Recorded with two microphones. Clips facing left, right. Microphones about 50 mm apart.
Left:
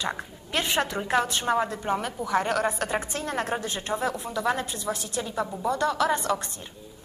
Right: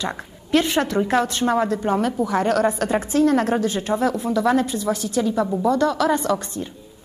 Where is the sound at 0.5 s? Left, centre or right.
Centre.